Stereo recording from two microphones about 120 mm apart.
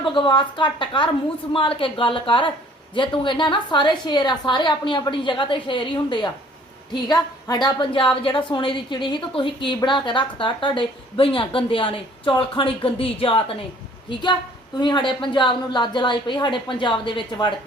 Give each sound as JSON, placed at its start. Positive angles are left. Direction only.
{"t": 0.0, "sound": "a woman's voice", "side_deg": 45}